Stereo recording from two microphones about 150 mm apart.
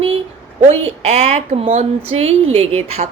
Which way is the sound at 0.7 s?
45° right (ahead or behind).